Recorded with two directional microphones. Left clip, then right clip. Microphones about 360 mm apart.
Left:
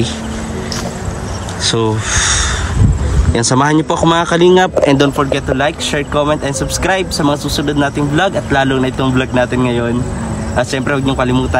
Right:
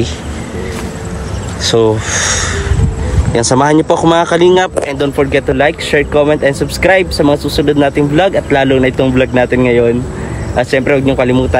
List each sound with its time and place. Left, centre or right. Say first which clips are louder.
1.7 s speech: right 5 dB; centre
3.3 s speech: right 3 dB; centre
4.8 s speech: left 3 dB; left
5.2 s speech: right 4 dB; centre